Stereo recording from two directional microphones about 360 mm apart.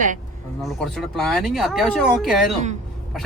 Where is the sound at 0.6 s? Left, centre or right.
Centre.